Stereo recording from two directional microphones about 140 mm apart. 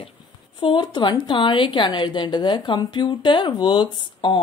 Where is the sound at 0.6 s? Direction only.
35° left (ahead or behind).